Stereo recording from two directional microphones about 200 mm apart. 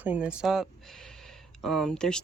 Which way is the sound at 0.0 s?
5° right (ahead or behind).